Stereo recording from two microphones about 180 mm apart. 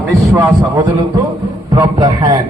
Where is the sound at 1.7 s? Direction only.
20° right (ahead or behind).